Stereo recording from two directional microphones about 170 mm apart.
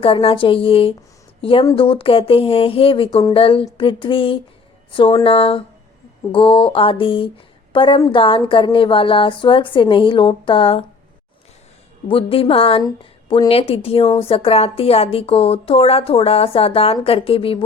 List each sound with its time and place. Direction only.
0.0 s a woman's voice: 35° left (ahead or behind)
12.0 s speech: 35° left (ahead or behind)